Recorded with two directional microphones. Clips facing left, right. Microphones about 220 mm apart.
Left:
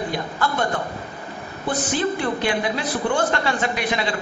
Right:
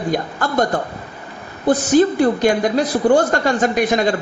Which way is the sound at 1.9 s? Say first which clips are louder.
Right 11 dB; 45° right (ahead or behind).